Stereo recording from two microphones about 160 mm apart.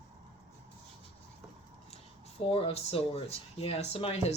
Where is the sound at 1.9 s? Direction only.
40° left (ahead or behind).